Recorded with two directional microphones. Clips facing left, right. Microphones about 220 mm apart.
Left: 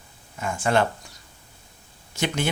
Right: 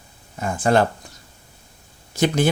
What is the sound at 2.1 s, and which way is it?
Speech, 35° right (ahead or behind).